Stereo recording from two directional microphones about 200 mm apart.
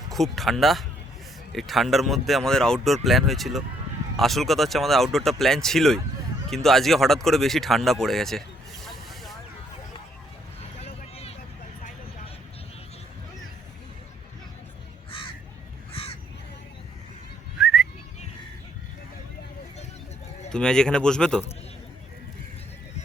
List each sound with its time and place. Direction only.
0.1 s speech: centre (ahead or behind)
10.6 s vehicle: 30° left (ahead or behind)
15.9 s crow: 30° left (ahead or behind)
17.6 s whistling: centre (ahead or behind)
20.5 s speech: 5° left (ahead or behind)